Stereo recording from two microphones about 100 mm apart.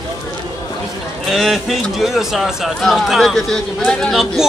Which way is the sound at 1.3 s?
Centre (ahead or behind).